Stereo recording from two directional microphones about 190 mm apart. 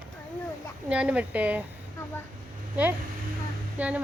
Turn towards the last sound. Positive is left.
turn(degrees=-10)  # may be behind; listen again after turning